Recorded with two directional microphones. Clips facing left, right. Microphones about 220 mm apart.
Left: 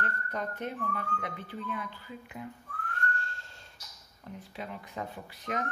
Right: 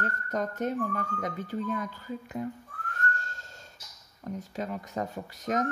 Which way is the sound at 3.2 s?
40° right (ahead or behind).